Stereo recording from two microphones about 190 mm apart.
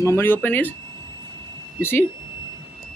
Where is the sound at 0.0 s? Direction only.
15° left (ahead or behind).